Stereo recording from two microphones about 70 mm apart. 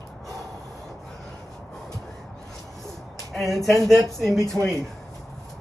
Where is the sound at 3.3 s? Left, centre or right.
Centre.